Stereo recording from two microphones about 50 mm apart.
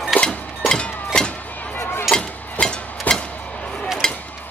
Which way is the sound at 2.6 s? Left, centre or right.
Centre.